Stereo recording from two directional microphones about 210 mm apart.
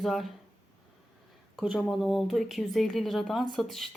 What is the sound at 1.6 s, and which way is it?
Speech, centre (ahead or behind).